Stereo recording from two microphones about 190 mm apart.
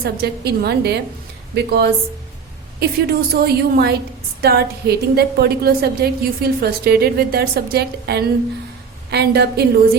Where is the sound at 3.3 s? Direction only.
55° right (ahead or behind).